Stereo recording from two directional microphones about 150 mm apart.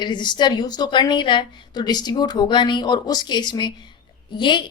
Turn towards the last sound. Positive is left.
turn(degrees=30)  # may be behind; listen again after turning